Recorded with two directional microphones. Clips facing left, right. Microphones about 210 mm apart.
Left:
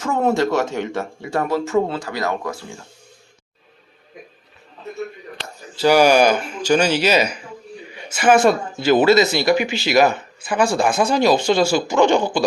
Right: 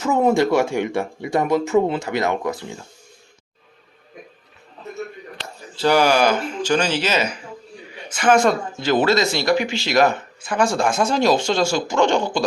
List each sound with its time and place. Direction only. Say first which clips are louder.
0.0 s speech: right 2 dB; 10° right (ahead or behind)
5.8 s speech: left 3 dB; 10° left (ahead or behind)